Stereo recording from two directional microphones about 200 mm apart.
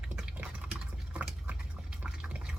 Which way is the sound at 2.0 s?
5° right (ahead or behind).